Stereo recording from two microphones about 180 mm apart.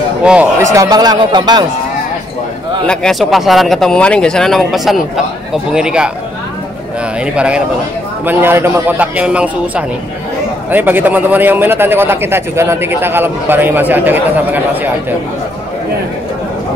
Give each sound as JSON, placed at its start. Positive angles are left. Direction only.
{"t": 0.2, "sound": "a man's voice", "side_deg": -5}
{"t": 2.9, "sound": "speech", "side_deg": 5}
{"t": 7.3, "sound": "a man's voice", "side_deg": -5}